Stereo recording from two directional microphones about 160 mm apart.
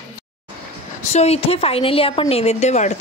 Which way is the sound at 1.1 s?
40° left (ahead or behind).